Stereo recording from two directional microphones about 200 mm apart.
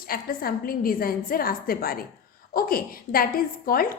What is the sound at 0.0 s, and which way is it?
A woman's voice, 45° left (ahead or behind).